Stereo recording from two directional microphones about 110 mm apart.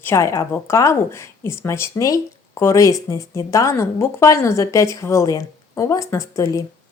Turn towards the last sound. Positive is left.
turn(degrees=30)  # may be behind; listen again after turning